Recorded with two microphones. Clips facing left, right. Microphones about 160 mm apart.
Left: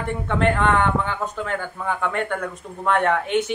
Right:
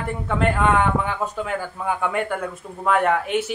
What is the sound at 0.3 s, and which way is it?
Speech, 5° right (ahead or behind).